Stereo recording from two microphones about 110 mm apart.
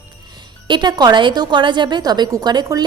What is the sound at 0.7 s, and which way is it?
A woman's voice, 40° right (ahead or behind).